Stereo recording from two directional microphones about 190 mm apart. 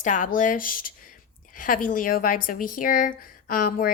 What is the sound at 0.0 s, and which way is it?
Speech, 45° left (ahead or behind).